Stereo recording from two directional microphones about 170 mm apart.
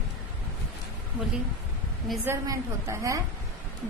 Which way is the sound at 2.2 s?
15° right (ahead or behind).